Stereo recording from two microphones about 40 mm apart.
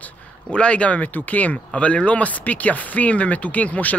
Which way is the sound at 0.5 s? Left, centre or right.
Left.